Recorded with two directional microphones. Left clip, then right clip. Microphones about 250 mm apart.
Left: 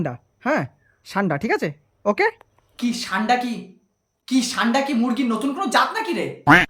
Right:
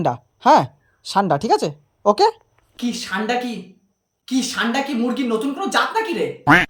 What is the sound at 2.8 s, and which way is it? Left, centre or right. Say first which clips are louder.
A woman's voice: even; centre.